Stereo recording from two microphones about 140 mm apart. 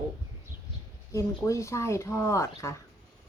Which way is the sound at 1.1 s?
20° left (ahead or behind).